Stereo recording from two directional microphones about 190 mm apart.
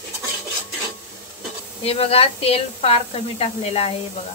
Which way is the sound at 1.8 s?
30° left (ahead or behind).